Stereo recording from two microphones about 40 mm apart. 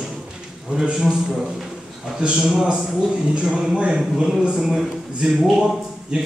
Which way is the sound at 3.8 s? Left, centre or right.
Centre.